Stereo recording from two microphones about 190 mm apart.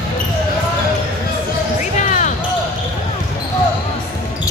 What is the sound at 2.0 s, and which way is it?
Basketball bounce, 40° left (ahead or behind).